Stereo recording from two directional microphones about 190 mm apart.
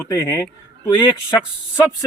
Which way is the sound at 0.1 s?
15° left (ahead or behind).